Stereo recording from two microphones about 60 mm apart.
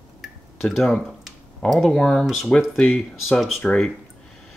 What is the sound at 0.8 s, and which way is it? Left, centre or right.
Speech, centre.